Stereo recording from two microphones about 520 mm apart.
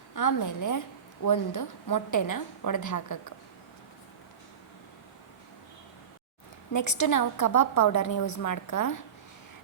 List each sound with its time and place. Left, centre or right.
0.1 s a woman's voice: left
6.8 s a woman's voice: left